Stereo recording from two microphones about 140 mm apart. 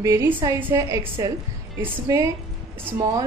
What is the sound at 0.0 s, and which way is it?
A woman's voice, 25° right (ahead or behind).